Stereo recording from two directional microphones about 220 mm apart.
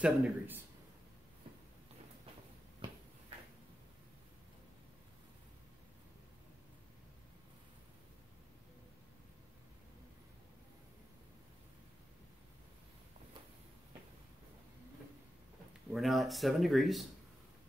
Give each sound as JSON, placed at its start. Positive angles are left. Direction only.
{"t": 0.0, "sound": "a man's voice", "side_deg": -5}
{"t": 15.9, "sound": "speech", "side_deg": 0}